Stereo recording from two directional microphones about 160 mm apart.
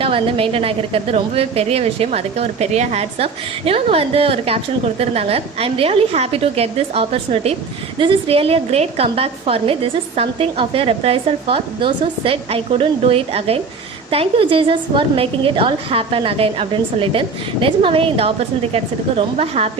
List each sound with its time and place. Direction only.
0.0 s a woman's voice: 35° right (ahead or behind)